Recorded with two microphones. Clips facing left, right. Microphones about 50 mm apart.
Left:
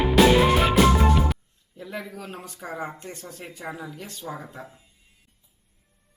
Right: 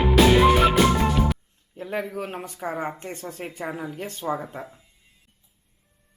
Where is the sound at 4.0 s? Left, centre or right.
Right.